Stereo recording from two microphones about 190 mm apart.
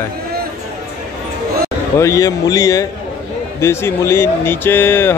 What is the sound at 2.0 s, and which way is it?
Speech, 15° left (ahead or behind).